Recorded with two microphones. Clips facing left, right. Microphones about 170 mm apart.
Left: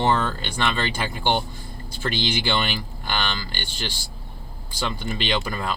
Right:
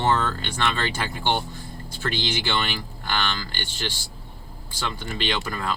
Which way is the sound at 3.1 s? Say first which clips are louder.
Even; 20° left (ahead or behind).